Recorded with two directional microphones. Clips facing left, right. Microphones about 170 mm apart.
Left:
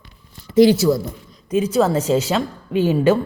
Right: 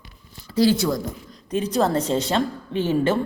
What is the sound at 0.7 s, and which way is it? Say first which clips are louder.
A woman's voice: left 6 dB; 5° left (ahead or behind).